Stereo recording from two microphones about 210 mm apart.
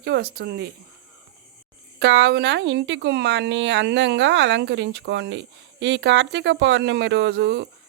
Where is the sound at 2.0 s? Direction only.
55° right (ahead or behind).